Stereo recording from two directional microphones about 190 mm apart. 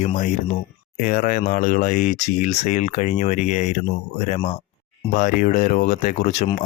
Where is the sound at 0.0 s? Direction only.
40° left (ahead or behind).